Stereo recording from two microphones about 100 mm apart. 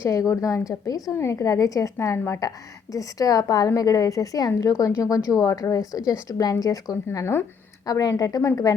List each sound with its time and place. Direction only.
0.0 s a woman's voice: 35° left (ahead or behind)